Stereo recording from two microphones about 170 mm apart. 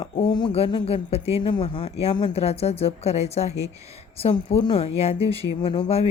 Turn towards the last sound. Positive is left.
turn(degrees=35)  # may be behind; listen again after turning